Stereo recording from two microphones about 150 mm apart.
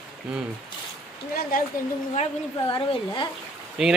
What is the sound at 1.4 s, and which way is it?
Speech, 75° left (ahead or behind).